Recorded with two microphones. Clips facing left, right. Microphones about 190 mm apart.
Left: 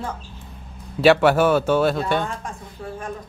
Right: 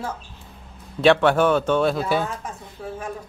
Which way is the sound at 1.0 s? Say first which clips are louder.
Left 1 dB; 5° left (ahead or behind).